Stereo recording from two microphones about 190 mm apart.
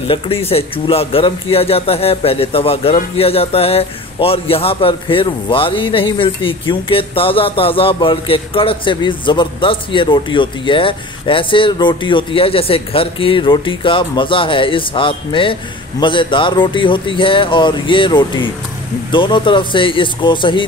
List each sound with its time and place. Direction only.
0.1 s speech: 30° left (ahead or behind)